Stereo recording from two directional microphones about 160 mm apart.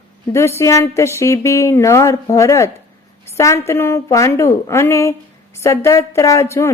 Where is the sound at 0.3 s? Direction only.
15° left (ahead or behind).